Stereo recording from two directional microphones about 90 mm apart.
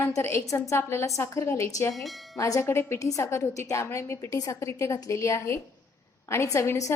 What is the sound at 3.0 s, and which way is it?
A woman's voice, 40° left (ahead or behind).